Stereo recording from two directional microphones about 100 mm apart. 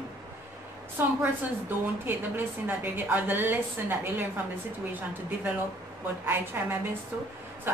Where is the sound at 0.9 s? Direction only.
20° right (ahead or behind).